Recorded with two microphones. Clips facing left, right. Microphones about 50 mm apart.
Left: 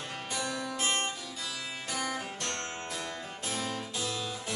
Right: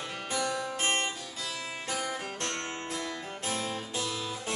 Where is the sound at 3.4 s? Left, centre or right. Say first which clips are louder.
Right 1 dB; right.